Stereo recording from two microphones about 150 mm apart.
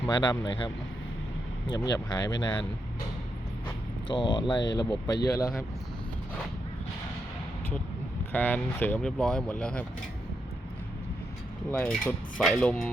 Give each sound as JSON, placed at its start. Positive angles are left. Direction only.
{"t": 0.1, "sound": "speech", "side_deg": 30}
{"t": 4.1, "sound": "speech", "side_deg": 30}
{"t": 8.3, "sound": "speech", "side_deg": 10}
{"t": 11.7, "sound": "speech", "side_deg": 10}